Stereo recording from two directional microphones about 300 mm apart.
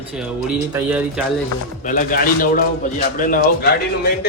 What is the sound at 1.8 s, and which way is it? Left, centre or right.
A man's voice, left.